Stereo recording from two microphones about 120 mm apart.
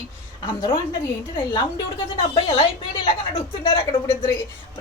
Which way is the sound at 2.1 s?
45° left (ahead or behind).